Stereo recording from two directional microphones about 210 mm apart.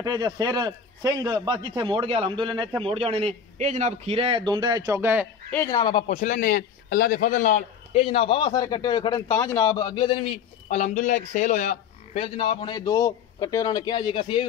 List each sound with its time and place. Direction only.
0.0 s a man's voice: 20° right (ahead or behind)
5.5 s a man's voice: 15° left (ahead or behind)
6.1 s a man's voice: 40° left (ahead or behind); by 14.4 s 25° left (ahead or behind)